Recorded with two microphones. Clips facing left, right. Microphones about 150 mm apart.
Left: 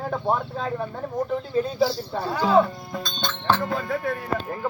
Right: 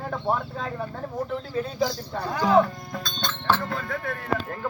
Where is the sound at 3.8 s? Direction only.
25° left (ahead or behind).